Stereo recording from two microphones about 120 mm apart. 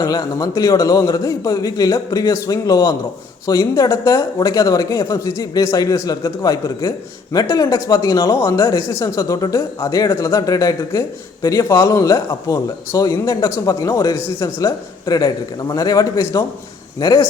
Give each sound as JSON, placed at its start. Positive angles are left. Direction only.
{"t": 0.0, "sound": "a man's voice", "side_deg": 30}